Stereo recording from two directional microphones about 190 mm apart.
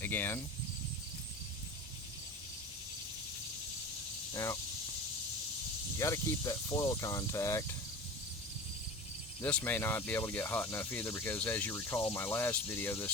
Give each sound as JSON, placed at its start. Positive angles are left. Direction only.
{"t": 0.0, "sound": "speech", "side_deg": 10}
{"t": 6.0, "sound": "speech", "side_deg": 15}
{"t": 9.4, "sound": "speech", "side_deg": 5}